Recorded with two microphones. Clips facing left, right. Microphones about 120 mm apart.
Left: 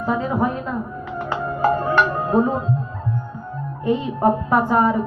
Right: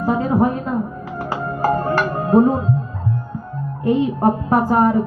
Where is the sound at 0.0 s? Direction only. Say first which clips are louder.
Right 4 dB; 40° right (ahead or behind).